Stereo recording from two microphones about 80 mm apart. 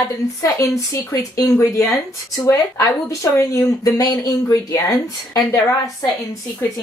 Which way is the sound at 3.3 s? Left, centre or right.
Left.